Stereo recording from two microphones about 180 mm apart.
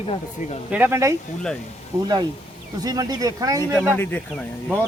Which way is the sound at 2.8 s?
20° right (ahead or behind).